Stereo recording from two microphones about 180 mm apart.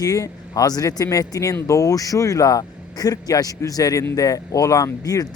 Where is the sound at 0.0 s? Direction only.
20° left (ahead or behind).